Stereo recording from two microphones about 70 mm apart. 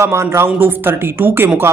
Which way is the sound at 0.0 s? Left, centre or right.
Right.